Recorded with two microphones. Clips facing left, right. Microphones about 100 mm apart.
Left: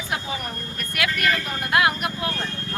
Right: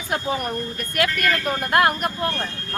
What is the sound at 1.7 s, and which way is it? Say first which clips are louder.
Speech: right 2 dB; 45° right (ahead or behind).